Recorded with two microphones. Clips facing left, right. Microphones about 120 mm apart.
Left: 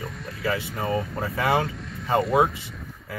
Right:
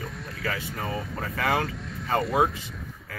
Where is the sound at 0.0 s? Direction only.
Centre (ahead or behind).